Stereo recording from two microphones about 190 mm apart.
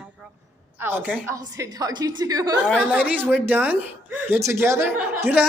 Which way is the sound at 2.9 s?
5° right (ahead or behind).